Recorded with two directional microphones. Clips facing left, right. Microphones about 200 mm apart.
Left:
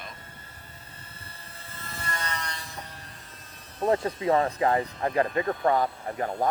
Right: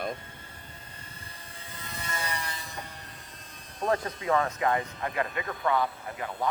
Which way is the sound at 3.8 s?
25° left (ahead or behind).